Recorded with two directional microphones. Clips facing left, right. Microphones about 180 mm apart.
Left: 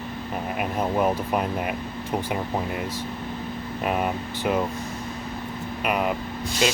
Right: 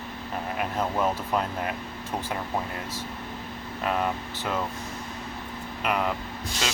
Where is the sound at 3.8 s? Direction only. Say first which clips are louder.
Left 2 dB; 15° left (ahead or behind).